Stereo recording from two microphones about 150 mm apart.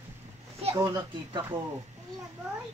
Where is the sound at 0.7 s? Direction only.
25° right (ahead or behind).